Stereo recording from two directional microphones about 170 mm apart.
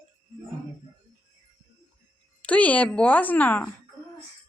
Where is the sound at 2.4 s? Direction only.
10° left (ahead or behind).